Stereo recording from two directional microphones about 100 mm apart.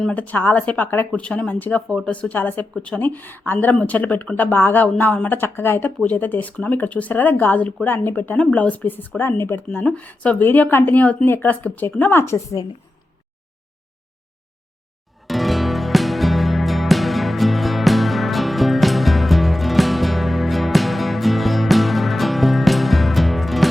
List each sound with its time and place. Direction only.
0.1 s a woman's voice: 15° left (ahead or behind)
9.6 s a woman's voice: 10° left (ahead or behind); by 12.6 s 30° left (ahead or behind)
15.3 s music: centre (ahead or behind)